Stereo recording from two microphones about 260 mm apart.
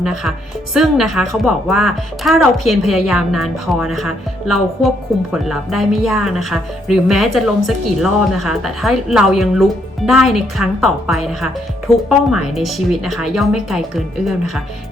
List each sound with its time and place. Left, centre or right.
0.0 s speech: centre